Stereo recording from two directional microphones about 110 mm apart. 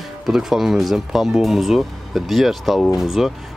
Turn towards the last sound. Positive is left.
turn(degrees=0)  # may be behind; listen again after turning